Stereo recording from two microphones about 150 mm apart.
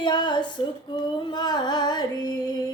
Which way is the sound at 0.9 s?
30° left (ahead or behind).